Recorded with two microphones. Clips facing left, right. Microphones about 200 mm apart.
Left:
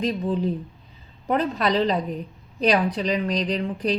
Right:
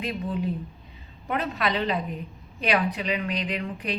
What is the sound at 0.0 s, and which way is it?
Speech, 35° left (ahead or behind).